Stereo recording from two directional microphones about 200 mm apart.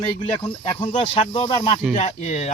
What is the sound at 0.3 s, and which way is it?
Speech, 25° left (ahead or behind).